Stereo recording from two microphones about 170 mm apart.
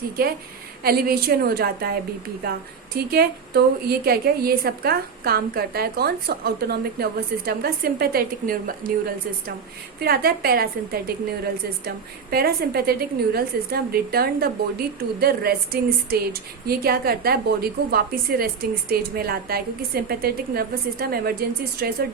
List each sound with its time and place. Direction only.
0.2 s speech: 60° right (ahead or behind)